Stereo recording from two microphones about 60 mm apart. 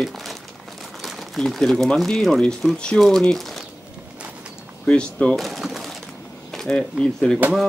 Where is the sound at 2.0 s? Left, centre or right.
Centre.